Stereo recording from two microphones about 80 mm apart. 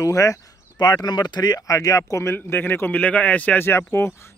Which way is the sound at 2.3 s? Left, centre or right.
Left.